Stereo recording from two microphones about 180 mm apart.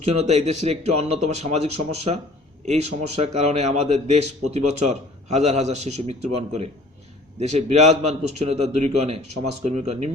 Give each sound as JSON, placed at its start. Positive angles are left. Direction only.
{"t": 0.0, "sound": "a man's voice", "side_deg": -35}